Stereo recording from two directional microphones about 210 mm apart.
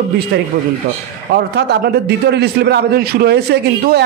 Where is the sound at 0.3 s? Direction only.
50° right (ahead or behind).